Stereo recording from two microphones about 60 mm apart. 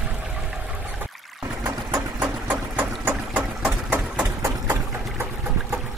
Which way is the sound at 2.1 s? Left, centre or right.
Right.